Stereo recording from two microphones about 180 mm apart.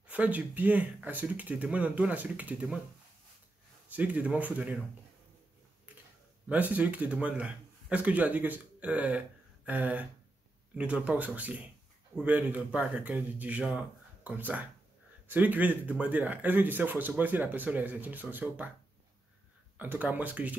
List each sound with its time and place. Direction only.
0.0 s speech: 10° right (ahead or behind)
3.9 s speech: 10° right (ahead or behind)
6.5 s speech: 10° right (ahead or behind)
19.8 s speech: 10° right (ahead or behind)